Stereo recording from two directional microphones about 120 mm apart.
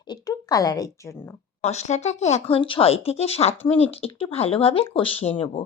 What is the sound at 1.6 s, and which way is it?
Speech, 70° left (ahead or behind).